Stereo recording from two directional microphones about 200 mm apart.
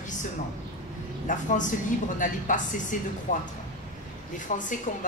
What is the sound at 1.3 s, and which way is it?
A woman's voice, 40° left (ahead or behind).